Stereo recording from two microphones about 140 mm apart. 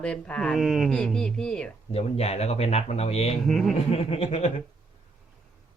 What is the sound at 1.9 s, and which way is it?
Speech, 45° left (ahead or behind).